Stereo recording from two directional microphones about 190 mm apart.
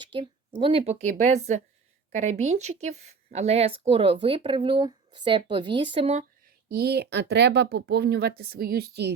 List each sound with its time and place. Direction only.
0.0 s a sound: 25° right (ahead or behind)
0.6 s speech: 30° right (ahead or behind)
6.7 s speech: 55° right (ahead or behind)